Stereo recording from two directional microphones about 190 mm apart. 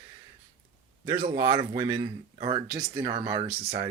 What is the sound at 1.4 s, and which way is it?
Speech, 20° right (ahead or behind).